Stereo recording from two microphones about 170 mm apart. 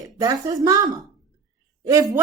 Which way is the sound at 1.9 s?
20° right (ahead or behind).